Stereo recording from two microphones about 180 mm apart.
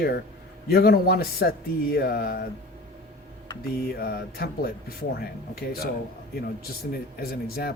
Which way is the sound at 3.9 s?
60° left (ahead or behind).